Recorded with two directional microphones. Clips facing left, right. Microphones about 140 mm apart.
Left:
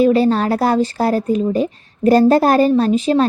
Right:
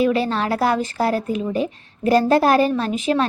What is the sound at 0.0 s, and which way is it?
A woman's voice, 40° left (ahead or behind).